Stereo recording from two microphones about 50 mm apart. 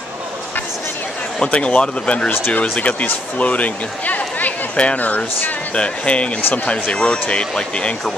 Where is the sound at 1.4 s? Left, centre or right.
Left.